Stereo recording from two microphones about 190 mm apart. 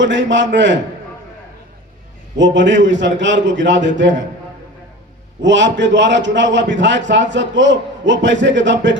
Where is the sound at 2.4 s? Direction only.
70° right (ahead or behind).